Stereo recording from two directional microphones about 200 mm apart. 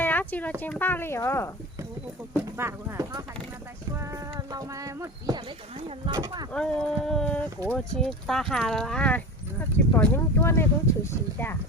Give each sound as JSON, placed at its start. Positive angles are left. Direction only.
{"t": 0.0, "sound": "a sound", "side_deg": 10}
{"t": 0.6, "sound": "speech", "side_deg": 10}
{"t": 2.3, "sound": "speech", "side_deg": -10}
{"t": 6.5, "sound": "speech", "side_deg": 5}